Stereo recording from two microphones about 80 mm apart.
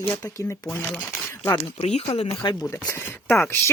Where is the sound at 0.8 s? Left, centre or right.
Centre.